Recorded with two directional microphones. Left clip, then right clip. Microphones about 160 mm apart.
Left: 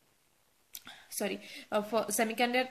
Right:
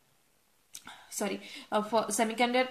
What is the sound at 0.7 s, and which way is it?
A woman's voice, 25° left (ahead or behind).